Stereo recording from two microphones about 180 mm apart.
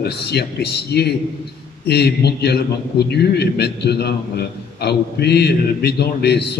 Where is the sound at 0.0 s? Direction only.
65° left (ahead or behind).